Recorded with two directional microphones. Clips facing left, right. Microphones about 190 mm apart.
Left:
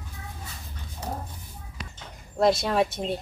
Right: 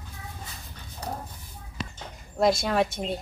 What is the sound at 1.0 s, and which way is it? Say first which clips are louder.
Speech: left 1 dB; 25° left (ahead or behind).